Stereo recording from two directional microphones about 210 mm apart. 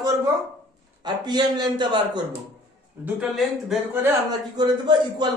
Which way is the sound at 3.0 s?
Centre (ahead or behind).